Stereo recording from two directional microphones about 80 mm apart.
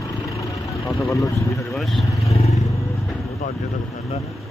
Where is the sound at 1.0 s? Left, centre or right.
Left.